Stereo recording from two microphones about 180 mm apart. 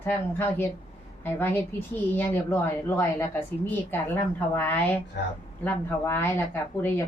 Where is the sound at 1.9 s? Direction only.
10° left (ahead or behind).